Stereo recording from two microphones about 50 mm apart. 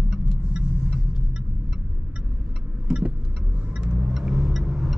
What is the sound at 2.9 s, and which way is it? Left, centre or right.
Vehicle, centre.